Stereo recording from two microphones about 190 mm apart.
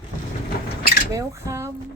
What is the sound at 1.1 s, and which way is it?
Speech, 15° right (ahead or behind).